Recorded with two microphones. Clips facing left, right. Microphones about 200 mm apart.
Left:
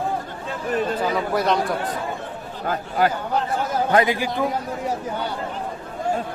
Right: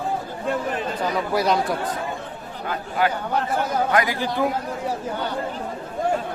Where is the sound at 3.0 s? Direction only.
40° left (ahead or behind).